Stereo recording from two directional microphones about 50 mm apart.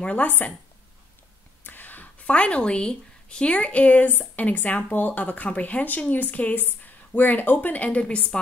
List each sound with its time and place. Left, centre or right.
0.0 s a woman's voice: left
0.3 s speech: left
1.6 s a sound: left
2.2 s a woman's voice: left